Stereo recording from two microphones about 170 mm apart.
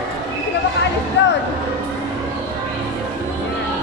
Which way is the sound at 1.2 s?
90° left.